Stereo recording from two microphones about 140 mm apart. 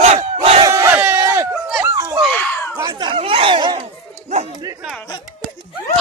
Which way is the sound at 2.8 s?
35° right (ahead or behind).